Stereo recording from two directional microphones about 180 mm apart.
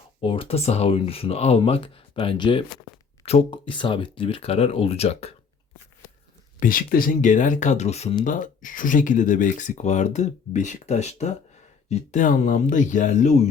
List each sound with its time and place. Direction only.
0.2 s speech: 30° left (ahead or behind)
6.6 s speech: 50° left (ahead or behind)